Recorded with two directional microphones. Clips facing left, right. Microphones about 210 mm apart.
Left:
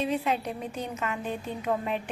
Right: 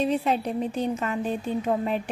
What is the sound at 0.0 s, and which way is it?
A woman's voice, 35° right (ahead or behind).